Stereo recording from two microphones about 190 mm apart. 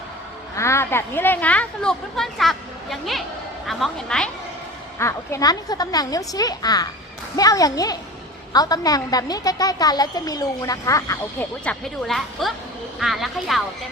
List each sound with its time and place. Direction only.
0.5 s a woman's voice: 15° left (ahead or behind)
4.9 s a woman's voice: 15° left (ahead or behind); by 13.6 s centre (ahead or behind)